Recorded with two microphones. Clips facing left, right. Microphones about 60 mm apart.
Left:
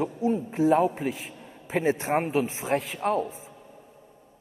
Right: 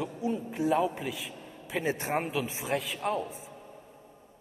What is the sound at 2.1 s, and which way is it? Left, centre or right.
A man's voice, left.